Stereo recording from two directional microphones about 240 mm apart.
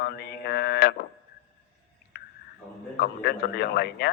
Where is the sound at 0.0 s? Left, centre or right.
Left.